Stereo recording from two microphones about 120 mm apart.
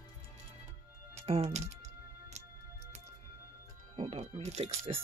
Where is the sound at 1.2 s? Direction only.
60° right (ahead or behind).